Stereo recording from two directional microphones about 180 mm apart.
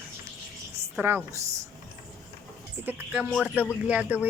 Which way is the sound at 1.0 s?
10° right (ahead or behind).